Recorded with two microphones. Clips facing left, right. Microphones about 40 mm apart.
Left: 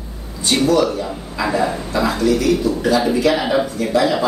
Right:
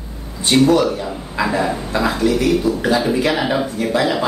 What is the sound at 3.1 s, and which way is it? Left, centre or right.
Speech, centre.